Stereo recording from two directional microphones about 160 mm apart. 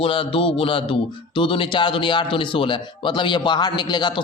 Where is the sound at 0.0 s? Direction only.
35° left (ahead or behind).